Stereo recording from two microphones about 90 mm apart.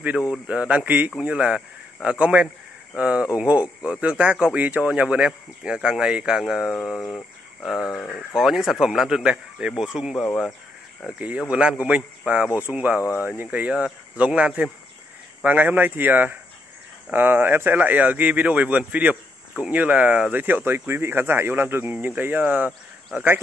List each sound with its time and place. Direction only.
0.3 s speech: 10° right (ahead or behind); by 7.2 s 10° left (ahead or behind)
7.8 s speech: 25° left (ahead or behind)
8.4 s speech: centre (ahead or behind); by 23.4 s 20° right (ahead or behind)